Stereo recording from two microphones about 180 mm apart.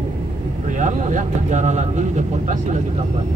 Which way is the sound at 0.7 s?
45° right (ahead or behind).